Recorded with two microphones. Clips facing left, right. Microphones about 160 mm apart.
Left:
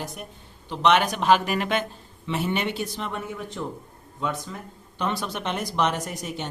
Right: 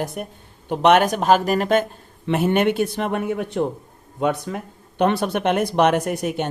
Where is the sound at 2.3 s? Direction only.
55° right (ahead or behind).